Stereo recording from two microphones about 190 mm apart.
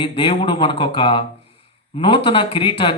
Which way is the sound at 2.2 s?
25° left (ahead or behind).